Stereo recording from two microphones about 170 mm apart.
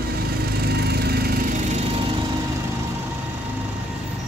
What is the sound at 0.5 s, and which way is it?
Lawn mower, 70° right (ahead or behind).